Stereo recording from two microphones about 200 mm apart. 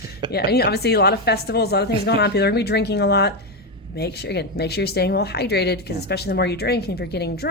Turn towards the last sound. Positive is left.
turn(degrees=55)  # may be behind; listen again after turning